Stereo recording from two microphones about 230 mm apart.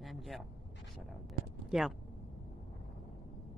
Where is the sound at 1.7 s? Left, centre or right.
Centre.